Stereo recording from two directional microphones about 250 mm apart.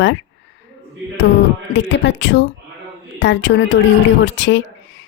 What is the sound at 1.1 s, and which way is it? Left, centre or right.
Speech, left.